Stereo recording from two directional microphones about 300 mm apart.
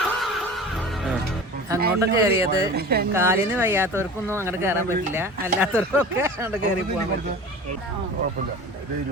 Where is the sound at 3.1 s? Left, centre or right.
Centre.